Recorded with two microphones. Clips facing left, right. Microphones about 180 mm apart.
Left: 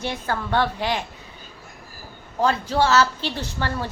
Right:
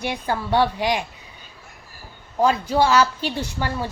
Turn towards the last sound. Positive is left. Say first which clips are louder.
# right 1 dB
turn(degrees=-10)  # may be behind; listen again after turning